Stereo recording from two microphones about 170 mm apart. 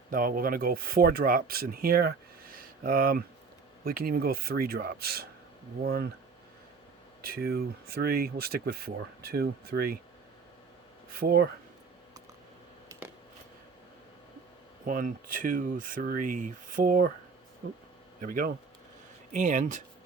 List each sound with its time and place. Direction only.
0.1 s speech: 55° right (ahead or behind)
7.2 s speech: 60° right (ahead or behind)
11.1 s speech: 60° right (ahead or behind)
14.8 s speech: 55° right (ahead or behind)
18.2 s speech: 55° right (ahead or behind)